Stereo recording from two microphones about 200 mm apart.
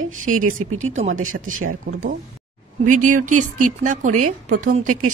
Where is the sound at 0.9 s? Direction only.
35° right (ahead or behind).